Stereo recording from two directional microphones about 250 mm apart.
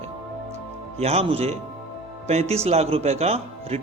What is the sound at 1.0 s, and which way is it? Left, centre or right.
A man's voice, right.